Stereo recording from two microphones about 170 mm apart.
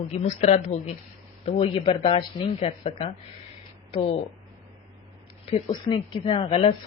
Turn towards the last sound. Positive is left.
turn(degrees=35)  # may be behind; listen again after turning